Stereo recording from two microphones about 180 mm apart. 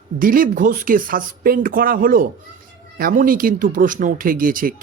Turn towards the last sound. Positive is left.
turn(degrees=-50)  # may be behind; listen again after turning